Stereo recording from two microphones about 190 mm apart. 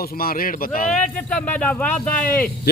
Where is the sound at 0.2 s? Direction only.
50° left (ahead or behind).